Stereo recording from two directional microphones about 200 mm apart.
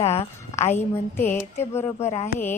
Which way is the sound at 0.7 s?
10° left (ahead or behind).